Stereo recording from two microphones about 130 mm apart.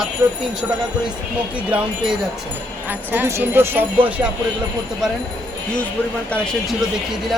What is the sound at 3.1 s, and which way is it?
Speech, 20° right (ahead or behind).